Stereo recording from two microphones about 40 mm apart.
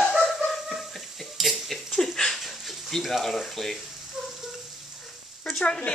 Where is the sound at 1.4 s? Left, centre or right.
Centre.